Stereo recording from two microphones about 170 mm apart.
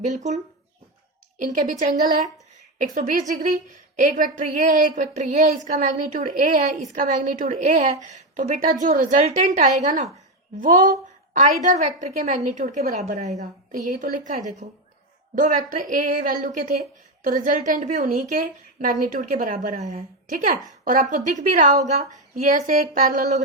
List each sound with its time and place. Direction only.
0.1 s a woman's voice: 45° right (ahead or behind)
1.4 s a woman's voice: 50° right (ahead or behind)
20.2 s a woman's voice: 55° right (ahead or behind)